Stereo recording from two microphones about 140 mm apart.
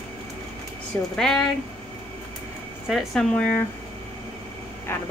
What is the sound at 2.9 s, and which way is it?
Speech, centre (ahead or behind).